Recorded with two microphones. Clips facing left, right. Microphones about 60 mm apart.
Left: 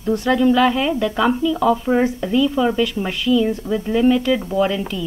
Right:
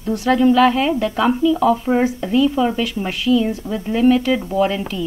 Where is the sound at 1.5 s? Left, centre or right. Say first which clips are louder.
Right 1 dB; centre.